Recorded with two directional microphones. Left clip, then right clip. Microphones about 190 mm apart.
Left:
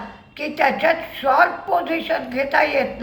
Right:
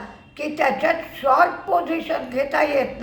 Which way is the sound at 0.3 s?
15° right (ahead or behind).